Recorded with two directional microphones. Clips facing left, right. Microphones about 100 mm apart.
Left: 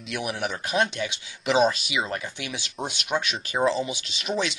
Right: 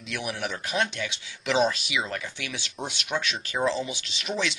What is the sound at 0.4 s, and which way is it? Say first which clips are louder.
Speech: left 3 dB; 20° left (ahead or behind).